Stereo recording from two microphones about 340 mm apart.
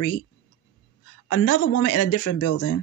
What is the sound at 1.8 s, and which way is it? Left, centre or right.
Speech, left.